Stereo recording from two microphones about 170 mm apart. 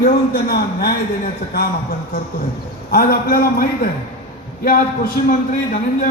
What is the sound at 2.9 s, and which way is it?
A man's voice, 60° left (ahead or behind).